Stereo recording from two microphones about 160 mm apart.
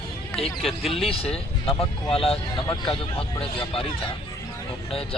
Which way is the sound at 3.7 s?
35° left (ahead or behind).